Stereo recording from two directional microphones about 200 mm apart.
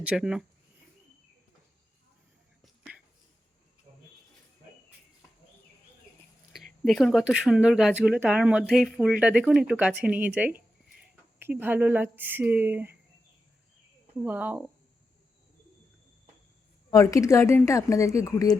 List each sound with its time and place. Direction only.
0.0 s speech: 5° right (ahead or behind)
6.8 s speech: centre (ahead or behind)
14.2 s speech: 10° right (ahead or behind)
16.9 s speech: 15° left (ahead or behind)